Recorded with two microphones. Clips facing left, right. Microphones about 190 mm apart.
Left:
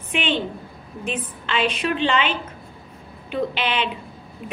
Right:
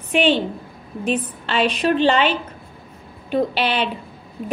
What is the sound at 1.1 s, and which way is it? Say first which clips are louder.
A woman's voice: right 5 dB; 40° right (ahead or behind).